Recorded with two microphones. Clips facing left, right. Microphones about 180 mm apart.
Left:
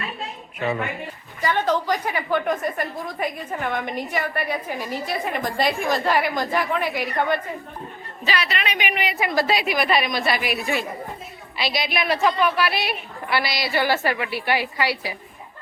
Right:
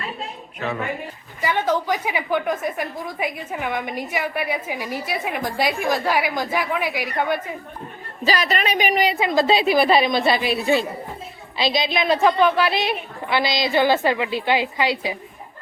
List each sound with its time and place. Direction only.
1.4 s a woman's voice: 10° right (ahead or behind)
8.2 s a woman's voice: 40° right (ahead or behind); by 15.1 s 20° right (ahead or behind)